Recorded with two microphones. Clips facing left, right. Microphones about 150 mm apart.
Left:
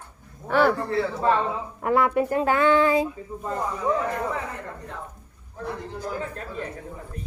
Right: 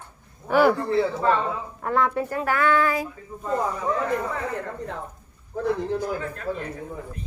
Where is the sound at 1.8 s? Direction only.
10° left (ahead or behind).